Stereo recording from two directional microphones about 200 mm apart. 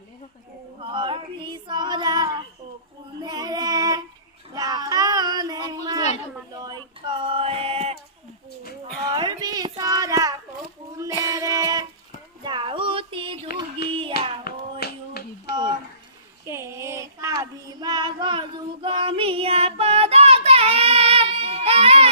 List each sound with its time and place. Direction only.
0.7 s female singing: 25° right (ahead or behind)
4.6 s child singing: 20° right (ahead or behind)
6.5 s male singing: 20° right (ahead or behind)
9.1 s a sound: 20° right (ahead or behind)
11.2 s music: 15° right (ahead or behind)
12.4 s a sound: 25° right (ahead or behind)
14.2 s hands: 55° left (ahead or behind)
14.8 s a sound: 55° left (ahead or behind)
16.4 s child singing: 15° right (ahead or behind); by 22.1 s 30° right (ahead or behind)